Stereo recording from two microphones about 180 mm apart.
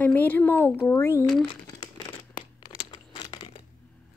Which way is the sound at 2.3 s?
25° left (ahead or behind).